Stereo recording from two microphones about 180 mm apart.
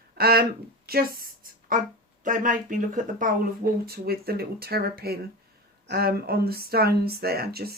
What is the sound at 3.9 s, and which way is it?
Speech, 60° right (ahead or behind).